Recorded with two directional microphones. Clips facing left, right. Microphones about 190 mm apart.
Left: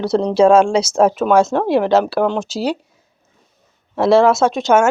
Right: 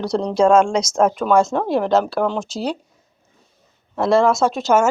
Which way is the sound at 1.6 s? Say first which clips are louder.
Left 3 dB; 75° left (ahead or behind).